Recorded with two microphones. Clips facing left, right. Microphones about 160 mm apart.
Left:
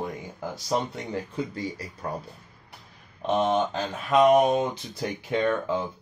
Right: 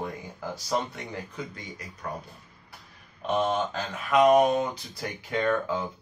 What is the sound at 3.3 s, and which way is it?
Speech, 20° left (ahead or behind).